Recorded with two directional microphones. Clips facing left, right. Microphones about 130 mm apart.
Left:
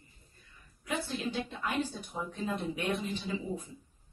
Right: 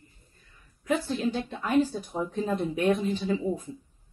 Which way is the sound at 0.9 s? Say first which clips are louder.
Right 8 dB; 45° right (ahead or behind).